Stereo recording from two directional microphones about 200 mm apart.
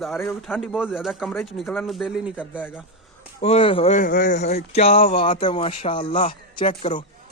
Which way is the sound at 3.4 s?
30° left (ahead or behind).